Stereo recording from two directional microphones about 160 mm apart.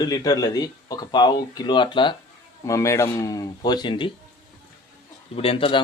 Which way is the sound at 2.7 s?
20° left (ahead or behind).